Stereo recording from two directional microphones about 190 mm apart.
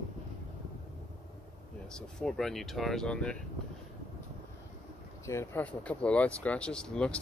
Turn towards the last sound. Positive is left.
turn(degrees=5)  # may be behind; listen again after turning